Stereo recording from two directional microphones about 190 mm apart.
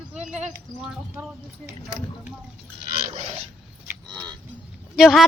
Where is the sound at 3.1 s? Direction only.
35° right (ahead or behind).